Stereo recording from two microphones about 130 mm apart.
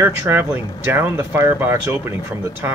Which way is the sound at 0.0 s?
15° right (ahead or behind).